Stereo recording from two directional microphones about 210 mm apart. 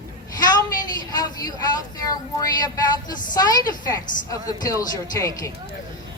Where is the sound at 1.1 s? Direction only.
20° left (ahead or behind).